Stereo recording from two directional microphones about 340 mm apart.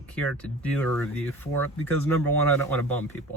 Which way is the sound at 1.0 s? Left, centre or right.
Centre.